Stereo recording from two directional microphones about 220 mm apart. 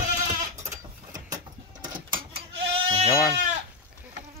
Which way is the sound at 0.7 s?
15° right (ahead or behind).